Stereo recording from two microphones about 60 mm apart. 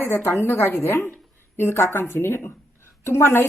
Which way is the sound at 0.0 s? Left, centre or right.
Left.